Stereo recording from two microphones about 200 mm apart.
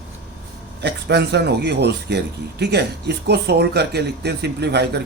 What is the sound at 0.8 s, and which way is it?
Speech, 55° right (ahead or behind).